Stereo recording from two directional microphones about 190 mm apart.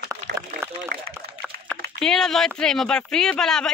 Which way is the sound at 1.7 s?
5° left (ahead or behind).